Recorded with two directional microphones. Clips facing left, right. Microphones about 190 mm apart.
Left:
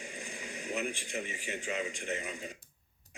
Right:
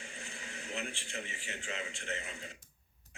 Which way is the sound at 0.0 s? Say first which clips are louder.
Left 5 dB; 15° left (ahead or behind).